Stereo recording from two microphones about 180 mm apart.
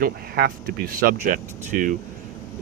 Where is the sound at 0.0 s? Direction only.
60° right (ahead or behind).